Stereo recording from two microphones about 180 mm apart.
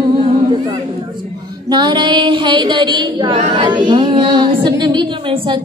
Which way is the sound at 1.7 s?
25° right (ahead or behind).